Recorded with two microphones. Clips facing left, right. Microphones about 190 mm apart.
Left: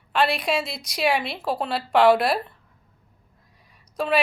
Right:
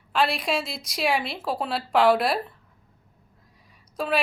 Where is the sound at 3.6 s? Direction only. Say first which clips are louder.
Left 3 dB; centre (ahead or behind).